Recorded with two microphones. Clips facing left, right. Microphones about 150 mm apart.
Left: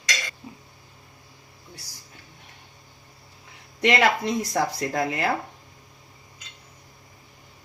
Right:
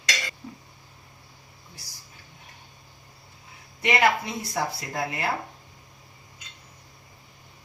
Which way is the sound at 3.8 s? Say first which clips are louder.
Left 2 dB; 80° left.